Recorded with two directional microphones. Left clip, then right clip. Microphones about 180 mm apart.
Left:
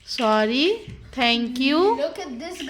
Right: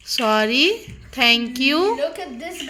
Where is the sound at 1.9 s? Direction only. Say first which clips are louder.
Right 2 dB; 20° right (ahead or behind).